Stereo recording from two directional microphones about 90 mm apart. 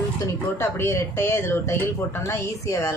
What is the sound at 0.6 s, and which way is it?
A woman's voice, 30° left (ahead or behind).